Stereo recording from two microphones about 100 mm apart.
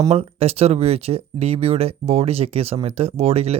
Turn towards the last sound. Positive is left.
turn(degrees=-90)